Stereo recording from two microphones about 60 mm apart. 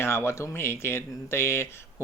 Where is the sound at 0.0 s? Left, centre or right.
Left.